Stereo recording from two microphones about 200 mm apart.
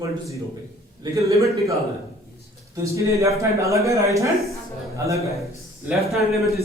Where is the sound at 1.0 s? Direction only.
15° right (ahead or behind).